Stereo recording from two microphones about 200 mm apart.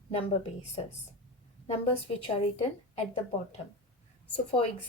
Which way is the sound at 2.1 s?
30° left (ahead or behind).